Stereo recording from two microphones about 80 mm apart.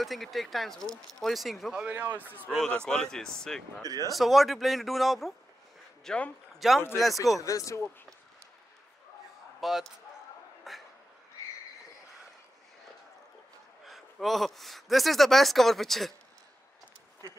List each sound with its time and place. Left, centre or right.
0.0 s speech: centre
2.0 s a man's voice: right
2.5 s speech: centre
3.8 s speech: right
4.1 s speech: centre
6.0 s speech: centre
6.6 s speech: centre
7.4 s speech: left
9.6 s speech: centre
10.7 s a sound: centre
13.8 s speech: centre